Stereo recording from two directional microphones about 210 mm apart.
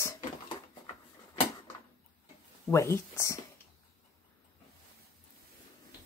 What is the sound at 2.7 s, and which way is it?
Speech, 15° left (ahead or behind).